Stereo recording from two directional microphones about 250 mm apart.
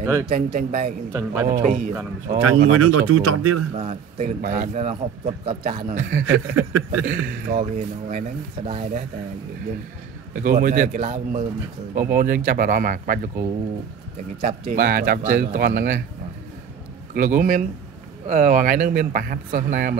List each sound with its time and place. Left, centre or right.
0.0 s a man's voice: centre
0.3 s a man's voice: right
1.1 s speech: centre
1.5 s a man's voice: right
2.7 s speech: right
3.7 s a man's voice: right
10.3 s a man's voice: right
17.1 s a man's voice: right